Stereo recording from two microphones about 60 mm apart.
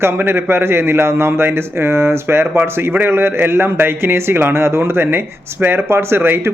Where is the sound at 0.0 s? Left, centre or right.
Right.